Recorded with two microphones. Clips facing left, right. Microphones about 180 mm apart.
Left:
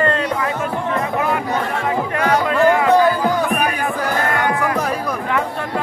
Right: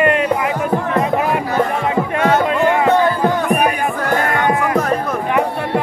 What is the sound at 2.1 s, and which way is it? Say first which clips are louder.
Music: right 1 dB; 25° right (ahead or behind).